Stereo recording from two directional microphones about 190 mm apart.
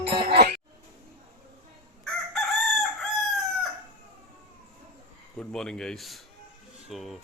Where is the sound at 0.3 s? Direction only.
55° right (ahead or behind).